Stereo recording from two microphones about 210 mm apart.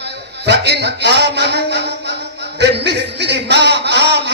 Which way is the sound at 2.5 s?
55° right (ahead or behind).